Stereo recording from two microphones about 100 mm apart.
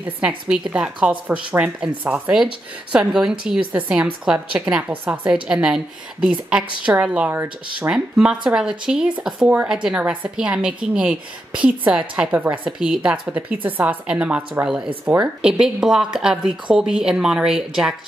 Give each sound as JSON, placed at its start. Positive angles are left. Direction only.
{"t": 0.5, "sound": "a woman's voice", "side_deg": -5}
{"t": 6.8, "sound": "a woman's voice", "side_deg": -10}